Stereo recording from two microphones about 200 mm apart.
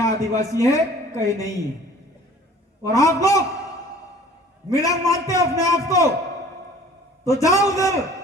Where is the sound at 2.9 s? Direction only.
15° left (ahead or behind).